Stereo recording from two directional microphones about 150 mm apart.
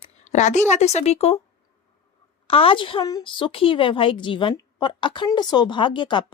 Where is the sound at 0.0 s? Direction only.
50° left (ahead or behind).